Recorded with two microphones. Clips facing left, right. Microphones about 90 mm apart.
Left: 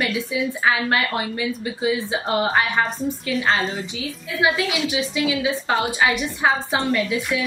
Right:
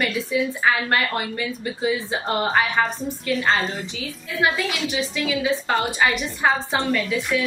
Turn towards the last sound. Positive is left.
turn(degrees=5)  # may be behind; listen again after turning